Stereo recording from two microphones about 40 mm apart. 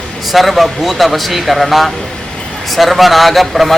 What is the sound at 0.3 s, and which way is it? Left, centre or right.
Speech, centre.